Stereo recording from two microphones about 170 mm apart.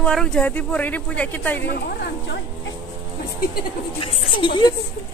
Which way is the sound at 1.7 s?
70° left (ahead or behind).